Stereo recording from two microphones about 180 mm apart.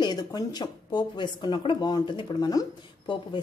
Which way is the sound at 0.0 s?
25° left (ahead or behind).